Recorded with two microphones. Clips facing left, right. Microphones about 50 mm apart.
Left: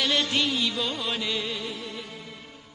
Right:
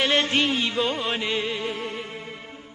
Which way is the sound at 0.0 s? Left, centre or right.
Right.